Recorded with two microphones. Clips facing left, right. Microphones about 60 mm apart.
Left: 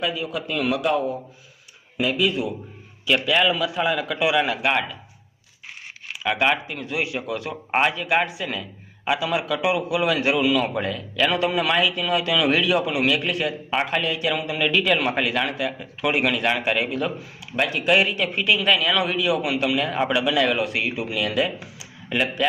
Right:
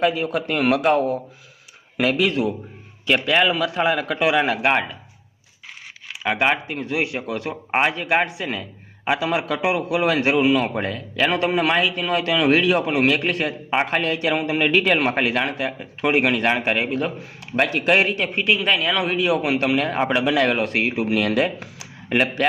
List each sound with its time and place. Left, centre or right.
0.0 s a man's voice: right
3.1 s a man's voice: right
6.4 s a man's voice: right
17.4 s a man's voice: right